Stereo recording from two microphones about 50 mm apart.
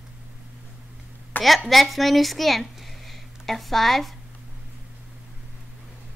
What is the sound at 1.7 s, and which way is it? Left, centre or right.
Speech, centre.